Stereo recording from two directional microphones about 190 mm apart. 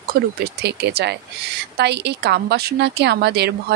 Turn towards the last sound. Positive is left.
turn(degrees=-60)  # may be behind; listen again after turning